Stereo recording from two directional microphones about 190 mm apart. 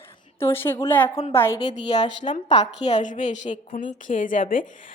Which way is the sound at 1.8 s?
30° left (ahead or behind).